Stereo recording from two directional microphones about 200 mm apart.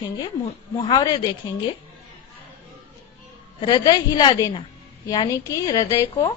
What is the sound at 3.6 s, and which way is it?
A woman's voice, 20° left (ahead or behind).